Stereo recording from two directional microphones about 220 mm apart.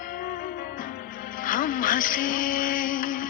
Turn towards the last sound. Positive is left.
turn(degrees=40)  # may be behind; listen again after turning